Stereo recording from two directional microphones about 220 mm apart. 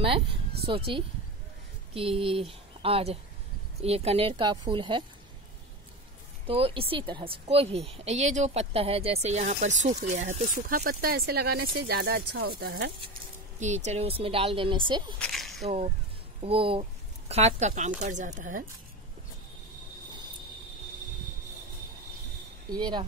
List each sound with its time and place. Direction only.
0.0 s a woman's voice: 25° right (ahead or behind)
6.4 s a woman's voice: 25° right (ahead or behind); by 12.9 s 45° right (ahead or behind)
13.6 s a woman's voice: 30° right (ahead or behind)
15.1 s a sound: 5° left (ahead or behind)
15.6 s a woman's voice: 25° right (ahead or behind)
22.7 s a woman's voice: 20° right (ahead or behind)